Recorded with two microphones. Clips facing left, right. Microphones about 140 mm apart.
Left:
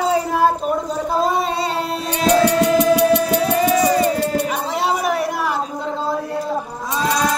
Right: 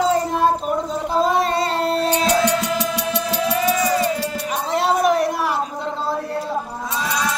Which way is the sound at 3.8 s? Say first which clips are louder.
Left 3 dB; 45° left (ahead or behind).